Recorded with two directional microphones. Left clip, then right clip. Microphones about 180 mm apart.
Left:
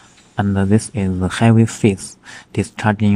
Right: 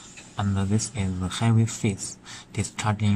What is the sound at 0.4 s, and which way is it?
Speech, 45° left (ahead or behind).